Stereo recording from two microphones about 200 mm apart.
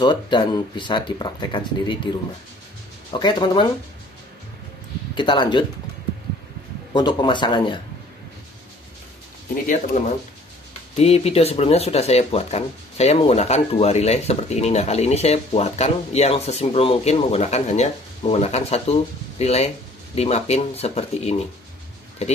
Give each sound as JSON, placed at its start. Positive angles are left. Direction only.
{"t": 0.0, "sound": "speech", "side_deg": 20}
{"t": 5.1, "sound": "speech", "side_deg": 25}
{"t": 6.9, "sound": "speech", "side_deg": 20}
{"t": 9.9, "sound": "speech", "side_deg": 35}